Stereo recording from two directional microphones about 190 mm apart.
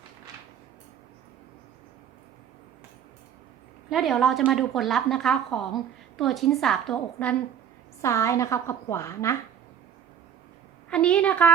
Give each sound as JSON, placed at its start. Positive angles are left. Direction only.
{"t": 3.8, "sound": "a woman's voice", "side_deg": 0}
{"t": 10.8, "sound": "a woman's voice", "side_deg": 5}